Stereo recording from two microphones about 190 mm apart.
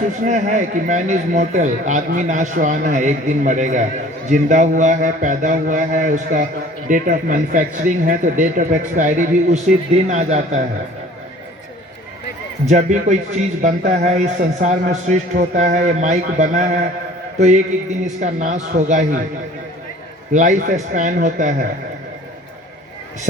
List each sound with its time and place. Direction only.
0.2 s a man's voice: 40° right (ahead or behind)
12.6 s a man's voice: 40° right (ahead or behind)
20.3 s a man's voice: 40° right (ahead or behind)